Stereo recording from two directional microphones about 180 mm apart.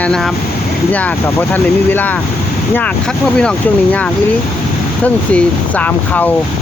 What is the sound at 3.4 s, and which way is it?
Speech, 5° left (ahead or behind).